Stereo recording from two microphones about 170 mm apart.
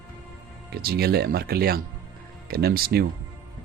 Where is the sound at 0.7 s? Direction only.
65° right (ahead or behind).